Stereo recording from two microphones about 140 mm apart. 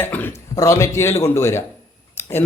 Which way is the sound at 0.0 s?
15° left (ahead or behind).